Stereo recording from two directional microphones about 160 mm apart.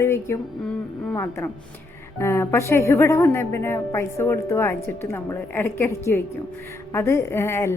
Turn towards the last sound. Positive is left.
turn(degrees=15)  # may be behind; listen again after turning